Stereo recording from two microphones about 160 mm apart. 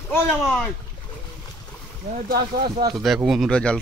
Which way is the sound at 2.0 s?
65° right (ahead or behind).